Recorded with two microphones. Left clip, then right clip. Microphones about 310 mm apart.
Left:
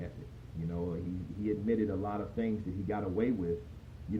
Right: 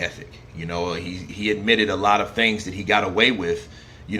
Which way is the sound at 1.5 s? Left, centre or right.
Right.